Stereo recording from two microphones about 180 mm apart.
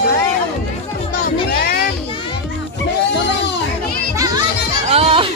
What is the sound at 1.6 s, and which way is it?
Children playing, 60° left (ahead or behind).